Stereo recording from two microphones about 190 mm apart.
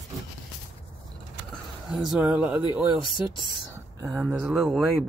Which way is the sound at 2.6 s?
25° left (ahead or behind).